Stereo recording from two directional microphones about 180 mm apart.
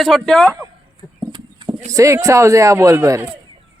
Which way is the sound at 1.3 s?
25° right (ahead or behind).